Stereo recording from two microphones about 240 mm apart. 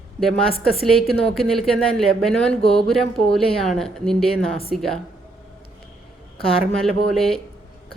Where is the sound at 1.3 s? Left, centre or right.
Centre.